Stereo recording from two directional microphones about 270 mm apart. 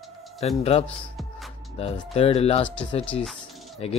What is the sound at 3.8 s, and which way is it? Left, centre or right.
Speech, left.